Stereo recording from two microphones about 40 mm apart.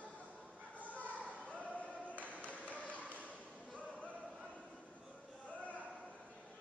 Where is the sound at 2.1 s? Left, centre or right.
Left.